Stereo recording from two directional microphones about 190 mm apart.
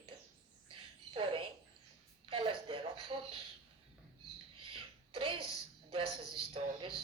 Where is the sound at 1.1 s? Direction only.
25° right (ahead or behind).